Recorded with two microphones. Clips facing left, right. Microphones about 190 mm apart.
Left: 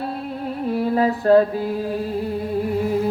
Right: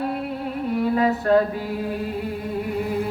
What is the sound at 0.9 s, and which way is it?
Mantra, 35° left (ahead or behind).